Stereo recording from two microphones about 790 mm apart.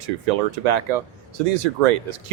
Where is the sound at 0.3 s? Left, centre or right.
Right.